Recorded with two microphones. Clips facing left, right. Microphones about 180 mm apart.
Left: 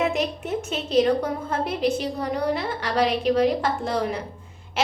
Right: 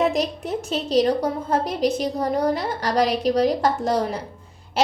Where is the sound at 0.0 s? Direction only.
35° right (ahead or behind).